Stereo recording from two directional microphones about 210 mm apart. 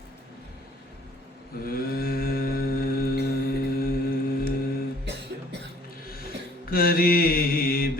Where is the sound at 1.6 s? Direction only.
45° left (ahead or behind).